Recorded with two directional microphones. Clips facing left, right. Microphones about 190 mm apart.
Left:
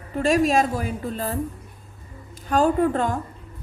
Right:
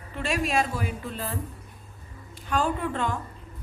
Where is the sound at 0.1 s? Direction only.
40° left (ahead or behind).